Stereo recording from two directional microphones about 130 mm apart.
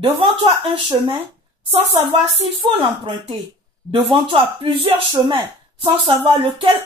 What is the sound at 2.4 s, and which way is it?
Speech, 50° right (ahead or behind).